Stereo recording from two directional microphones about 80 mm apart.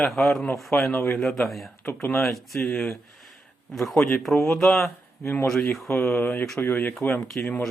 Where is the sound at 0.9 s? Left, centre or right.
Left.